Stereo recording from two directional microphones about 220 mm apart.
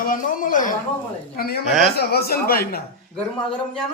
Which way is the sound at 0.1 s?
35° left (ahead or behind).